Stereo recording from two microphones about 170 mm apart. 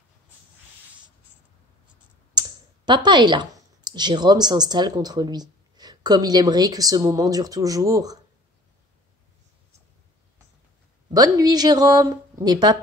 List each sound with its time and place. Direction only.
2.3 s speech: 25° right (ahead or behind)
11.1 s a woman's voice: 20° right (ahead or behind)